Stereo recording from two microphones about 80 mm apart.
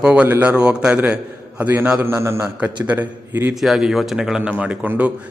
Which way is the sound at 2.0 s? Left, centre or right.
Right.